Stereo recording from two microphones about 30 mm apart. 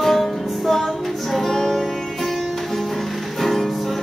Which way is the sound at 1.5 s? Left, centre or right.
Centre.